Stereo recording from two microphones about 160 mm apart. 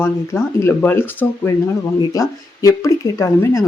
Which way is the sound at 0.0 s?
15° left (ahead or behind).